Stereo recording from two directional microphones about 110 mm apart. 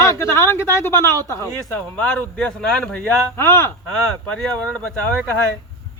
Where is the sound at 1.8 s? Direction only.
10° left (ahead or behind).